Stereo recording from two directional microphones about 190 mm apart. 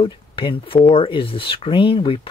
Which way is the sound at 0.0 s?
25° left (ahead or behind).